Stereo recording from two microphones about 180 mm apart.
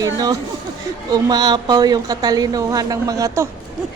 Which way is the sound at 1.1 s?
20° right (ahead or behind).